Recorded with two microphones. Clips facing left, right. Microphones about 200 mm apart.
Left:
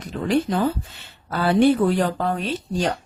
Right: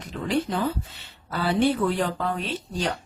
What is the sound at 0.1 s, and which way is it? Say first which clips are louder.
Speech: left 5 dB; 35° left (ahead or behind).